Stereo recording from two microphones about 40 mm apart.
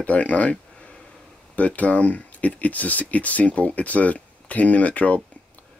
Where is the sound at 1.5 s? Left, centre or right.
Left.